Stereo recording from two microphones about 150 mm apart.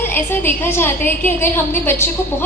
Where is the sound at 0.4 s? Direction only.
15° left (ahead or behind).